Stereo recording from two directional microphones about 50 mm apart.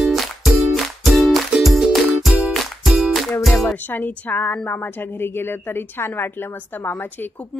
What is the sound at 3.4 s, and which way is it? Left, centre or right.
Music, centre.